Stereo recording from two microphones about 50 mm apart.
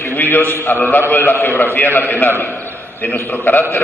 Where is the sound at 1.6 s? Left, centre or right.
Left.